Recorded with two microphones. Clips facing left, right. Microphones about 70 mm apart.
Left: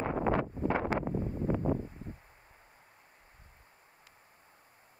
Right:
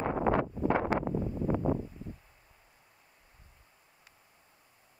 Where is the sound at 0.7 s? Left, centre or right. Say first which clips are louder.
Right 2 dB; right.